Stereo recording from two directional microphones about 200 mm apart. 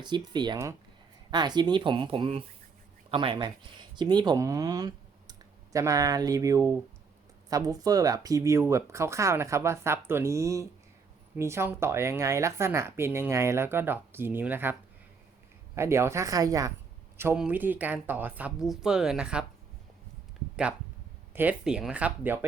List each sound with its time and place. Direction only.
0.0 s speech: 20° right (ahead or behind); by 19.5 s 5° right (ahead or behind)
21.3 s speech: 5° right (ahead or behind)